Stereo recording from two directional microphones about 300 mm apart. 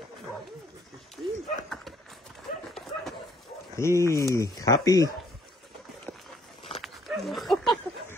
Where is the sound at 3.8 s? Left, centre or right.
Centre.